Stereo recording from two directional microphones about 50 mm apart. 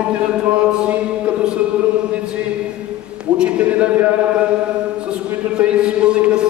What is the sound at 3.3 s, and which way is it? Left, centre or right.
Speech, right.